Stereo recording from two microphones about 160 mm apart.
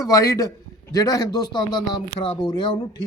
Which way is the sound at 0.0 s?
20° left (ahead or behind).